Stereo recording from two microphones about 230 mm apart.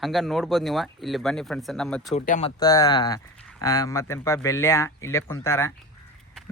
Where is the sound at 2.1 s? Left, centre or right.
Left.